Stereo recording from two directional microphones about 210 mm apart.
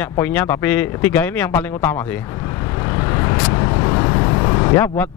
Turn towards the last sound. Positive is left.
turn(degrees=20)  # may be behind; listen again after turning